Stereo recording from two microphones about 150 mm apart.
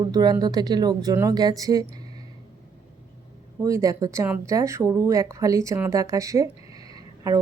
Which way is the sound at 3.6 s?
20° right (ahead or behind).